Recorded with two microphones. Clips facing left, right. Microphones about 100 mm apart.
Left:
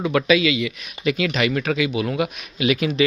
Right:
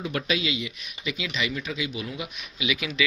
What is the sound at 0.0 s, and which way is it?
Speech, 90° left.